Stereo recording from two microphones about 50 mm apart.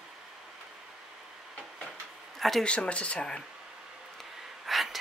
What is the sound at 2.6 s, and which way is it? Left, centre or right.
Speech, left.